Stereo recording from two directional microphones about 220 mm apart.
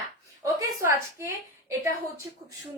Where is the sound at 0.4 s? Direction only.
15° right (ahead or behind).